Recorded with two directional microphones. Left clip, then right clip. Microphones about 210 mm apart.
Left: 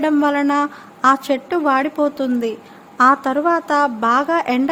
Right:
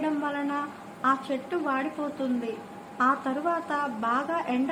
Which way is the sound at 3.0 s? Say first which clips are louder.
Left 12 dB; 55° left (ahead or behind).